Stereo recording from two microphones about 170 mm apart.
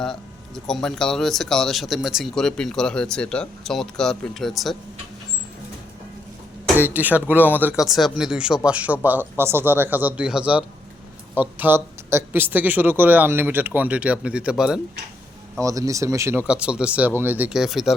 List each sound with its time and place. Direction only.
0.0 s speech: 5° left (ahead or behind)
6.7 s speech: 10° right (ahead or behind)
15.6 s speech: 20° right (ahead or behind)
16.5 s speech: 5° right (ahead or behind)